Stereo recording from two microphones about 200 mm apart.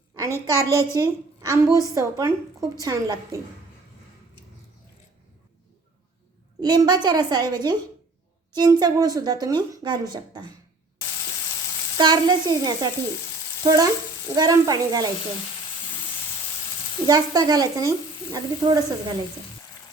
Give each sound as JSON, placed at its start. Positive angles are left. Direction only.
{"t": 0.2, "sound": "a woman's voice", "side_deg": -15}
{"t": 6.6, "sound": "speech", "side_deg": -20}
{"t": 11.9, "sound": "a woman's voice", "side_deg": -20}
{"t": 17.1, "sound": "speech", "side_deg": -20}